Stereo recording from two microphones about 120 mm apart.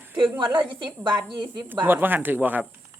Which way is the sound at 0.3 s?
40° right (ahead or behind).